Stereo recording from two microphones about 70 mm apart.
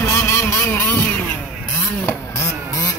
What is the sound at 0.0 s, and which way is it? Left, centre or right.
Vehicle, left.